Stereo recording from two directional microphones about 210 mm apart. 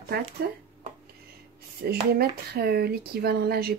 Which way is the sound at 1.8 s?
50° right (ahead or behind).